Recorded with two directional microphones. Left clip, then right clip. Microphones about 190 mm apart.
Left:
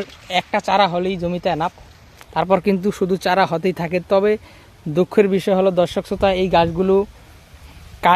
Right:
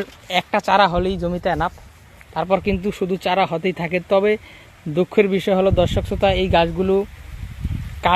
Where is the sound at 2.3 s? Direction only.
30° left (ahead or behind).